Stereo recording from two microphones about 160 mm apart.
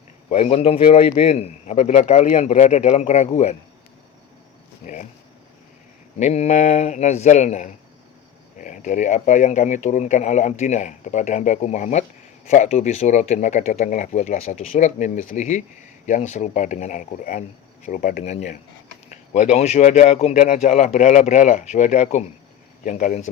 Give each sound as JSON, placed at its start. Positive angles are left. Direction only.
{"t": 0.3, "sound": "a man's voice", "side_deg": 40}
{"t": 6.1, "sound": "speech", "side_deg": 45}
{"t": 18.2, "sound": "speech", "side_deg": 45}